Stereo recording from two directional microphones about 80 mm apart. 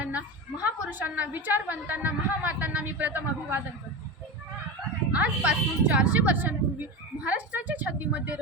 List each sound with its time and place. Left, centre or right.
0.0 s a woman's voice: centre
5.1 s a woman's voice: centre